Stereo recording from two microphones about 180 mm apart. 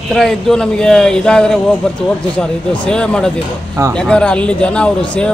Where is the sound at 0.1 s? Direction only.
Centre (ahead or behind).